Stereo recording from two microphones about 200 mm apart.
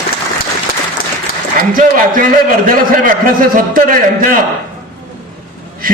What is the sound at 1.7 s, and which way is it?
A man's voice, 45° right (ahead or behind).